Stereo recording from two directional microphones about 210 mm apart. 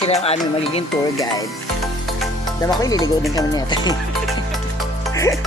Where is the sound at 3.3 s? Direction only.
20° left (ahead or behind).